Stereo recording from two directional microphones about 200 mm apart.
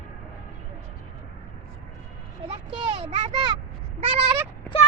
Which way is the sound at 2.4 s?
30° right (ahead or behind).